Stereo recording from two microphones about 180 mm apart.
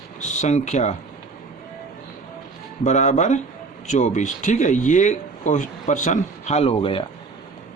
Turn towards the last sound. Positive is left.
turn(degrees=30)  # may be behind; listen again after turning